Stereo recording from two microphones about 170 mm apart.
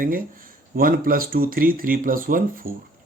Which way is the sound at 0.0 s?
55° right (ahead or behind).